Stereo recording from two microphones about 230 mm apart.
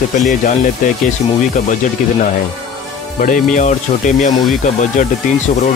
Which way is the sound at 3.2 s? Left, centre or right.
Left.